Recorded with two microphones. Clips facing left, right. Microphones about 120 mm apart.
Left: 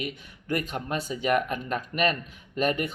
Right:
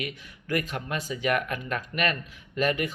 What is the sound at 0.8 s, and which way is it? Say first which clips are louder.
Speech: left 1 dB; 40° left (ahead or behind).